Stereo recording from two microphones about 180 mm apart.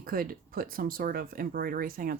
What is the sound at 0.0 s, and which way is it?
Speech, 55° right (ahead or behind).